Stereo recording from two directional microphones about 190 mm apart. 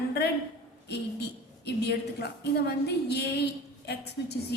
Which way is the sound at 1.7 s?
60° left (ahead or behind).